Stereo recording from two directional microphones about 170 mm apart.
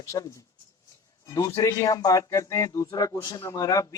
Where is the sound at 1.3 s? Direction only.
20° left (ahead or behind).